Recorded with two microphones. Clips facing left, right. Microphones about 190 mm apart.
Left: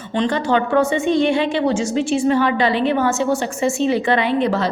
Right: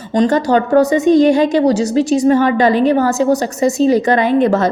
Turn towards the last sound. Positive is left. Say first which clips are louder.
# right 6 dB
turn(degrees=-45)  # may be behind; listen again after turning